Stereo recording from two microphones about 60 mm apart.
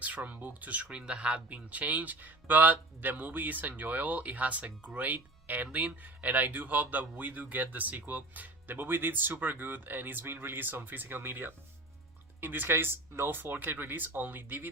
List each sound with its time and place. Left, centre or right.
0.0 s speech: right